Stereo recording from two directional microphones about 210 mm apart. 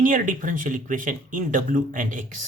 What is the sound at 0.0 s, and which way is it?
Speech, 40° right (ahead or behind).